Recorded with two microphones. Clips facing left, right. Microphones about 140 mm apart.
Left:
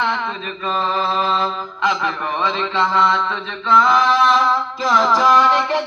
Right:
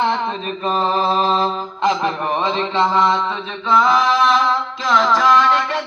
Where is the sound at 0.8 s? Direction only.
30° right (ahead or behind).